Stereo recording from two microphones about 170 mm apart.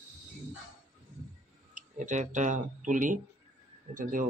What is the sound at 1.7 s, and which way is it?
Speech, 45° right (ahead or behind).